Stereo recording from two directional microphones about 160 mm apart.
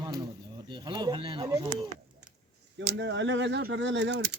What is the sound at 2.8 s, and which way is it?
Speech, 90° right.